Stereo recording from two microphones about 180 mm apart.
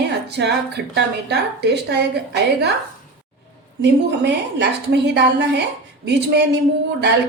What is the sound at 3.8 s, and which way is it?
A woman's voice, 70° right (ahead or behind).